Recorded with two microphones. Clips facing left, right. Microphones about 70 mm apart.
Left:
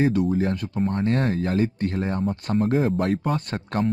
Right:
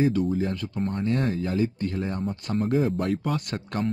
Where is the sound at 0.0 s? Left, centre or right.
Left.